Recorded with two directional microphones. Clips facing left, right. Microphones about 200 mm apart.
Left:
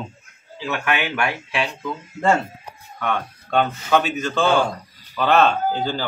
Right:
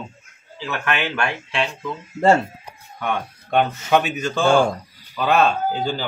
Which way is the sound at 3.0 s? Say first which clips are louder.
Even; 15° right (ahead or behind).